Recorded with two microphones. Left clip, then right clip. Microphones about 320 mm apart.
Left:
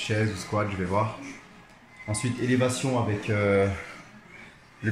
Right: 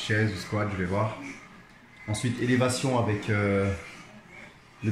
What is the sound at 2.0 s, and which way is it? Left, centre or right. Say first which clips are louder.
Speech: even; centre.